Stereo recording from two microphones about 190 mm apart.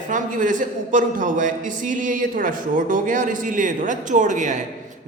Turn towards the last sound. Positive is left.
turn(degrees=-40)  # may be behind; listen again after turning